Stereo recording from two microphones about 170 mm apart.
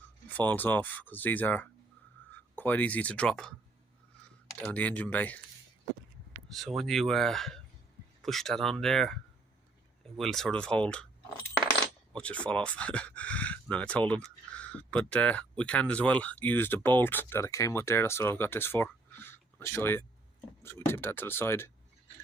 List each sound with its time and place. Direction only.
0.3 s speech: 10° left (ahead or behind)
4.6 s speech: 10° left (ahead or behind)
6.5 s speech: centre (ahead or behind)
10.2 s speech: centre (ahead or behind)
12.1 s speech: 5° left (ahead or behind)